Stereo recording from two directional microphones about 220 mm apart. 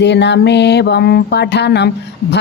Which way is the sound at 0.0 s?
50° left (ahead or behind).